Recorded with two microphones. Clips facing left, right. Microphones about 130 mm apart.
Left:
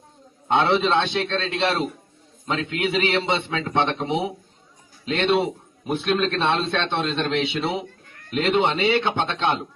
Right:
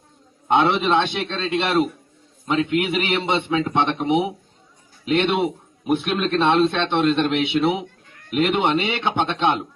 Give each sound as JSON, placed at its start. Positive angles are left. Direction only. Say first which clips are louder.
{"t": 0.4, "sound": "a man's voice", "louder": "right 1 dB", "side_deg": -15}